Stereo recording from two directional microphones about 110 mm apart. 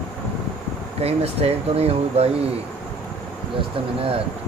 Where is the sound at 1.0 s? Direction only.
65° right (ahead or behind).